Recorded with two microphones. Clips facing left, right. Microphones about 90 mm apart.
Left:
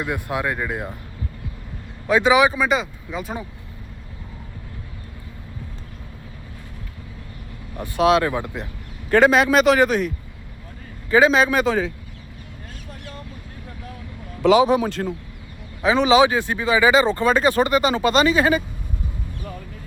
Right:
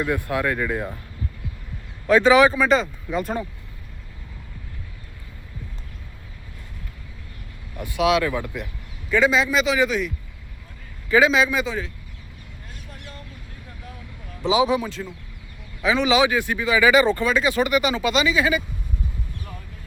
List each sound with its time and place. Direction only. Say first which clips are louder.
0.0 s speech: right 1 dB; 20° left (ahead or behind)
2.0 s speech: right 1 dB; 15° left (ahead or behind)
7.8 s speech: left 3 dB; 35° left (ahead or behind)
9.0 s speech: left 4 dB; 60° left (ahead or behind)
11.1 s speech: left 2 dB; 40° left (ahead or behind); by 11.8 s 55° left (ahead or behind)
14.4 s a man's voice: left 6 dB; 90° left
14.8 s speech: left 6 dB; 60° left (ahead or behind)
15.8 s speech: left 4 dB; 35° left (ahead or behind)
17.2 s speech: left 3 dB; 45° left (ahead or behind)